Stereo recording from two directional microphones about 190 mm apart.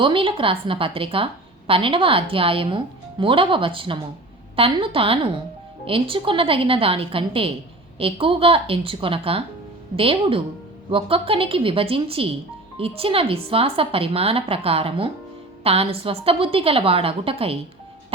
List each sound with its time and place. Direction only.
0.0 s a woman's voice: 25° right (ahead or behind)